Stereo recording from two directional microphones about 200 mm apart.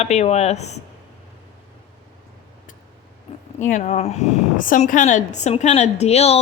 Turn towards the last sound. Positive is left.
turn(degrees=30)  # may be behind; listen again after turning